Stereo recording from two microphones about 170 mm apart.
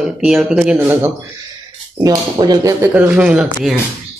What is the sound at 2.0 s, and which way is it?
Speech, 25° right (ahead or behind).